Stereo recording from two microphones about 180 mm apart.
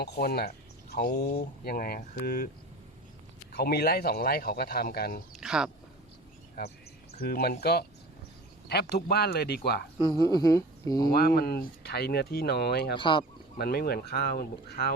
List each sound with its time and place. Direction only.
0.0 s speech: 60° left (ahead or behind)
3.5 s speech: 60° left (ahead or behind)
5.4 s a sound: 5° right (ahead or behind)
6.6 s speech: 60° left (ahead or behind)
10.0 s speech: 20° left (ahead or behind)
11.3 s speech: 60° left (ahead or behind)
13.0 s speech: 25° left (ahead or behind)
13.6 s speech: 60° left (ahead or behind)